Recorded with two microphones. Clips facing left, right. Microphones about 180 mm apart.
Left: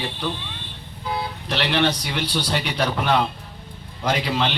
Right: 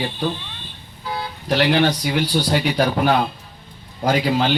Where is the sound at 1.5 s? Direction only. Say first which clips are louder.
Right 5 dB; 40° right (ahead or behind).